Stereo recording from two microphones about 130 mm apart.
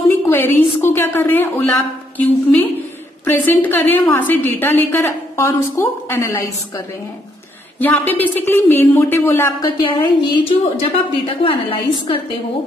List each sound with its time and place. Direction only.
0.3 s a woman's voice: 15° left (ahead or behind)
7.8 s a woman's voice: 15° left (ahead or behind)
9.6 s a woman's voice: 35° left (ahead or behind)